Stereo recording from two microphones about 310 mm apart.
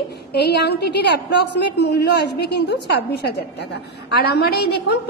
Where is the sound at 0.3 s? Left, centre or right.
Left.